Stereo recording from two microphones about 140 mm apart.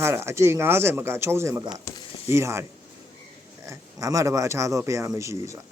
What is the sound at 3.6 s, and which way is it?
Speech, 25° right (ahead or behind).